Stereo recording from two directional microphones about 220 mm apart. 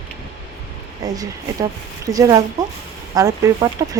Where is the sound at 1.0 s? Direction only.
15° right (ahead or behind).